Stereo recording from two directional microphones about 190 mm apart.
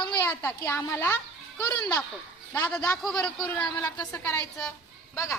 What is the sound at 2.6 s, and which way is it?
Speech, 5° left (ahead or behind).